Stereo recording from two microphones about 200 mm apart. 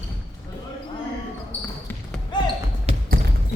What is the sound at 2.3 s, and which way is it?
Basketball bounce, 20° left (ahead or behind).